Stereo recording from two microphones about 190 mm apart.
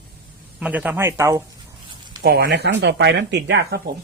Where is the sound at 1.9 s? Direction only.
25° right (ahead or behind).